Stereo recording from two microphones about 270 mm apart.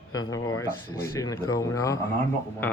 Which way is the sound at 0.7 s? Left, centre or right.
Left.